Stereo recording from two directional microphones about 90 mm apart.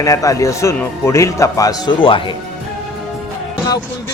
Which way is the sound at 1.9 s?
70° left (ahead or behind).